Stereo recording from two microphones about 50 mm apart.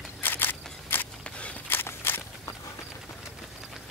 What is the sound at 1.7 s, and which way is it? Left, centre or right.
Walk, left.